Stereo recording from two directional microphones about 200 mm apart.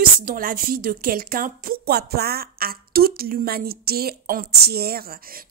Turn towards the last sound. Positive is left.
turn(degrees=-45)  # may be behind; listen again after turning